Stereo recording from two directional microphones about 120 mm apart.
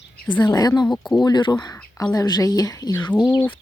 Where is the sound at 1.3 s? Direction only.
35° left (ahead or behind).